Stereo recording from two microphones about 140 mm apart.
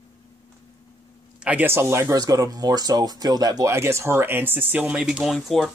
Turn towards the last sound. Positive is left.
turn(degrees=0)  # may be behind; listen again after turning